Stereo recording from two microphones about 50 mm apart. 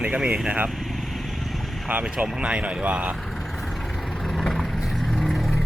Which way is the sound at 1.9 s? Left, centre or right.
Right.